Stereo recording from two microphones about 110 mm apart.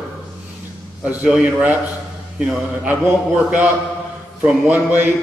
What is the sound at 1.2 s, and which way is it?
A man's voice, 15° right (ahead or behind).